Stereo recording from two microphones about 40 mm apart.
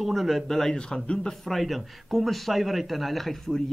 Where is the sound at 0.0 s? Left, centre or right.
Centre.